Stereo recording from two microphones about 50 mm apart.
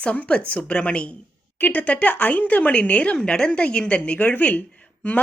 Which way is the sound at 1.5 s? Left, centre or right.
Left.